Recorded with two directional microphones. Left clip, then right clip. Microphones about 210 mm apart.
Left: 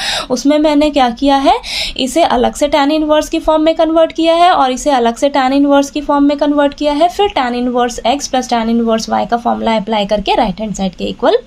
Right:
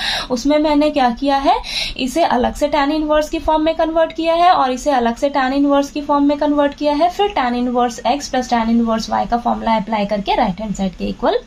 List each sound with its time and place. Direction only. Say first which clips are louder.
0.1 s a woman's voice: left 4 dB; 45° left (ahead or behind)